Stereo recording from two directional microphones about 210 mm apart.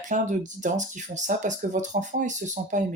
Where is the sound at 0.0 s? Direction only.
35° right (ahead or behind).